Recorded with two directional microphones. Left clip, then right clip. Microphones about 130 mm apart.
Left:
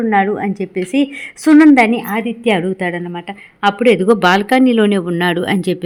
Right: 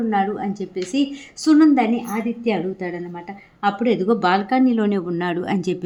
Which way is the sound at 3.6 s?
45° left (ahead or behind).